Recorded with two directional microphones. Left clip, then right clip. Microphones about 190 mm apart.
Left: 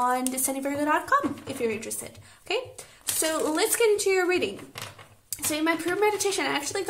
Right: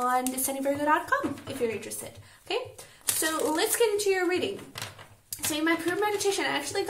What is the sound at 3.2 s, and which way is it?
A woman's voice, 45° left (ahead or behind).